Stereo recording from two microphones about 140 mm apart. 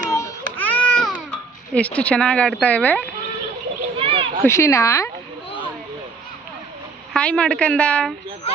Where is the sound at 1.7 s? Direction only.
10° left (ahead or behind).